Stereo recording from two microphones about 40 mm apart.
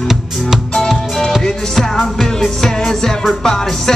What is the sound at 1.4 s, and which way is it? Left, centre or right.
Music, centre.